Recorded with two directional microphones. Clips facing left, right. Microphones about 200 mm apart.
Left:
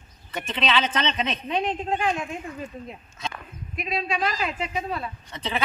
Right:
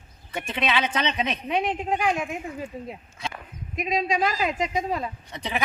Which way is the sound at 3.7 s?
15° right (ahead or behind).